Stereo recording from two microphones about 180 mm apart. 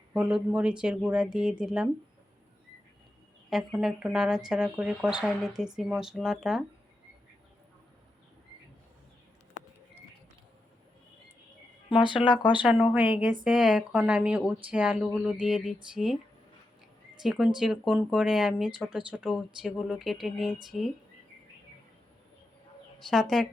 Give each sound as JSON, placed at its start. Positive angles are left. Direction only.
{"t": 0.1, "sound": "speech", "side_deg": -5}
{"t": 3.5, "sound": "speech", "side_deg": -5}
{"t": 11.9, "sound": "speech", "side_deg": 30}
{"t": 12.5, "sound": "speech", "side_deg": -5}
{"t": 17.2, "sound": "speech", "side_deg": -5}